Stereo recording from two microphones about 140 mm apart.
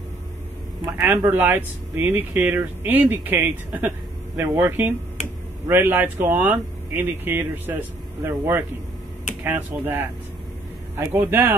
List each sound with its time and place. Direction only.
0.9 s speech: 15° right (ahead or behind)
11.1 s speech: 15° right (ahead or behind)